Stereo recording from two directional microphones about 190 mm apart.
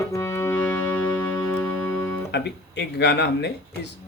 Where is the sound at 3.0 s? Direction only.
65° left (ahead or behind).